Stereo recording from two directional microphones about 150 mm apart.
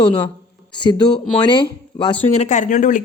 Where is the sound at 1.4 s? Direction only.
30° left (ahead or behind).